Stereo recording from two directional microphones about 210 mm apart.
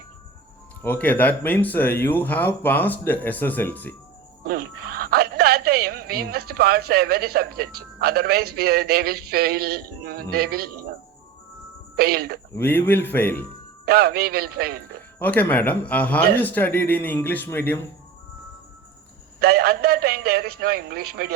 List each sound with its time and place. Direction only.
0.8 s speech: 10° left (ahead or behind)
4.4 s a sound: 45° right (ahead or behind)
8.5 s music: 50° right (ahead or behind)
11.9 s music: 45° right (ahead or behind)
12.5 s speech: 10° left (ahead or behind)
13.8 s music: 45° right (ahead or behind)
15.2 s speech: 5° left (ahead or behind)
19.4 s music: 50° right (ahead or behind)